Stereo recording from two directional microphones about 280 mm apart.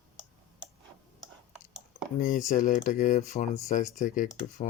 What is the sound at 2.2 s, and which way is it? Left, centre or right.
Speech, left.